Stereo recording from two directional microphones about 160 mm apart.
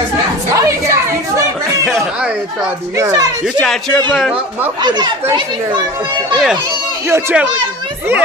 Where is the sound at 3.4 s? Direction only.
Centre (ahead or behind).